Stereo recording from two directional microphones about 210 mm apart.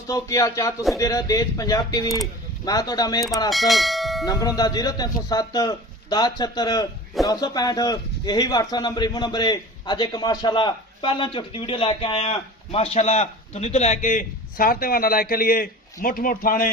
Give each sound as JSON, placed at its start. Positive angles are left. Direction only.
{"t": 0.1, "sound": "speech", "side_deg": 15}
{"t": 3.5, "sound": "speech", "side_deg": 0}
{"t": 4.3, "sound": "a man's voice", "side_deg": 15}